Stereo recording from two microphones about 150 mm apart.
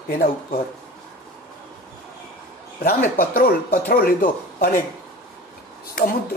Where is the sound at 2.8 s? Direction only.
75° left (ahead or behind).